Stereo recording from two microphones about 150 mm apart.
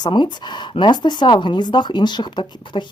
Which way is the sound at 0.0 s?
30° left (ahead or behind).